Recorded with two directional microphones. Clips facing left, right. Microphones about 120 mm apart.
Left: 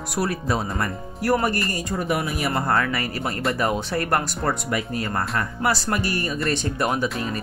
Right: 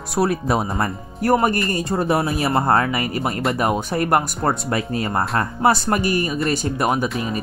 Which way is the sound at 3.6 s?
20° right (ahead or behind).